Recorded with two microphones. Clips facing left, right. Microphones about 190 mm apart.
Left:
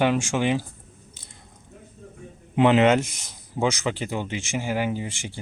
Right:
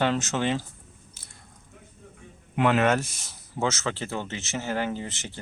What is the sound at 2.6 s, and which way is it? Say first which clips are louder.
Speech: left 5 dB; 20° left (ahead or behind).